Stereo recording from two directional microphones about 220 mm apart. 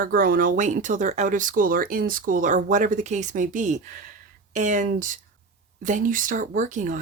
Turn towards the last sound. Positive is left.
turn(degrees=-35)  # may be behind; listen again after turning